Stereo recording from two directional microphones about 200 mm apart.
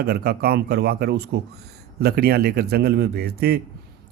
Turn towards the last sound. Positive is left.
turn(degrees=-50)  # may be behind; listen again after turning